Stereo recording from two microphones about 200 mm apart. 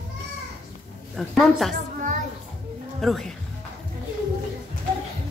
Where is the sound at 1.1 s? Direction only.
Centre (ahead or behind).